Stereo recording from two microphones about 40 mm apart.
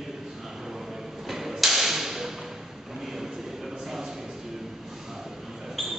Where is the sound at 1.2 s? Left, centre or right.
Centre.